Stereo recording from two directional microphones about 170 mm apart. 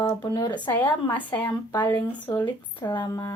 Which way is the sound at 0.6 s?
10° left (ahead or behind).